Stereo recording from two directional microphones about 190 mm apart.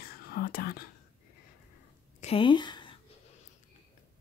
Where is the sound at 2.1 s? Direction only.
30° left (ahead or behind).